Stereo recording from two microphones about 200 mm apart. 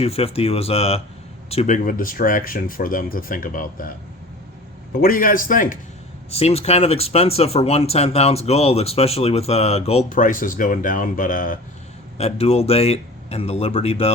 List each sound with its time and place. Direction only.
0.0 s speech: 30° left (ahead or behind)
4.9 s speech: 45° left (ahead or behind)
6.3 s speech: 30° left (ahead or behind)
12.1 s speech: 30° left (ahead or behind)